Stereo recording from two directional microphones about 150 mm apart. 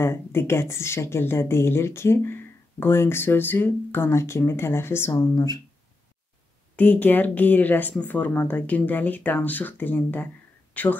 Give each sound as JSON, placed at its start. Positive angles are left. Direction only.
{"t": 0.0, "sound": "a woman's voice", "side_deg": 15}
{"t": 6.8, "sound": "a woman's voice", "side_deg": 10}